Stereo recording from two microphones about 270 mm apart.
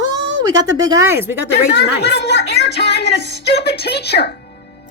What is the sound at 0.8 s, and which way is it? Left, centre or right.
Speech, centre.